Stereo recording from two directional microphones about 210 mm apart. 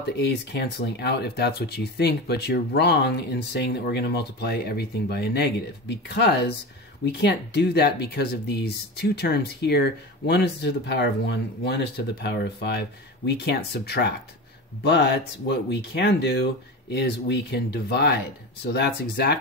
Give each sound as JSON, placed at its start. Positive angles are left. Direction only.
{"t": 0.2, "sound": "speech", "side_deg": 55}